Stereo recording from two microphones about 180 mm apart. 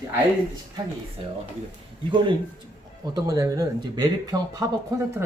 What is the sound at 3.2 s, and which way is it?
Speech, 20° right (ahead or behind).